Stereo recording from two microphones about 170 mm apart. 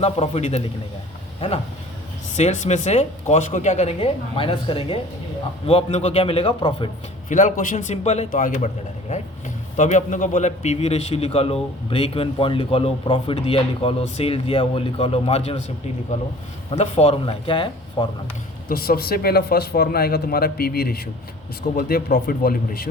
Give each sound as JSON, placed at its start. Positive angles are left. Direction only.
{"t": 0.0, "sound": "a man's voice", "side_deg": 40}
{"t": 2.3, "sound": "a man's voice", "side_deg": 45}
{"t": 7.3, "sound": "a man's voice", "side_deg": 45}
{"t": 8.3, "sound": "a man's voice", "side_deg": 50}
{"t": 16.7, "sound": "a man's voice", "side_deg": 40}
{"t": 18.7, "sound": "speech", "side_deg": 60}